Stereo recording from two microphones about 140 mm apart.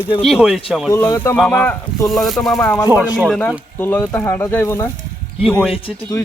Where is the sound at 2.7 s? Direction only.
25° left (ahead or behind).